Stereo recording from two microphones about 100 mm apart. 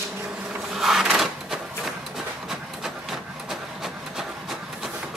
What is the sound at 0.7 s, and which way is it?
Drawer open or close, centre (ahead or behind).